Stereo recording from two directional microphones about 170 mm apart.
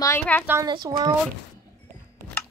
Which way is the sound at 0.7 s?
25° right (ahead or behind).